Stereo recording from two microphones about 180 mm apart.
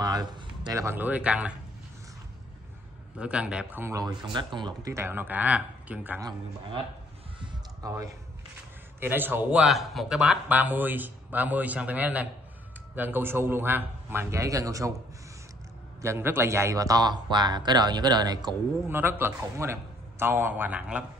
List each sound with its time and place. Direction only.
0.0 s a man's voice: 20° right (ahead or behind)
3.2 s a man's voice: 5° right (ahead or behind)
7.3 s a sound: 20° right (ahead or behind)
9.0 s a man's voice: 10° right (ahead or behind)
16.0 s a man's voice: 15° right (ahead or behind)
18.9 s a man's voice: 10° right (ahead or behind)